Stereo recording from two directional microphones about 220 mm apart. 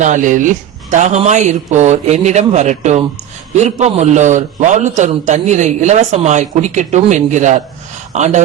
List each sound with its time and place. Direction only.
0.0 s a man's voice: 35° right (ahead or behind)